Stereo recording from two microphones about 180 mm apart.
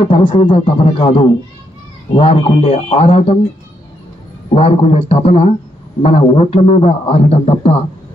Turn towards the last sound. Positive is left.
turn(degrees=35)  # may be behind; listen again after turning